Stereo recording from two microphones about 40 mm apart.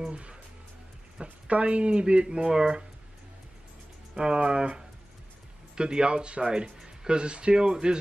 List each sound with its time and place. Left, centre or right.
1.2 s speech: right
4.1 s speech: right
5.8 s speech: centre